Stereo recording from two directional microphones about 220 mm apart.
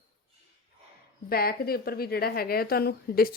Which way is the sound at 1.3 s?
45° left (ahead or behind).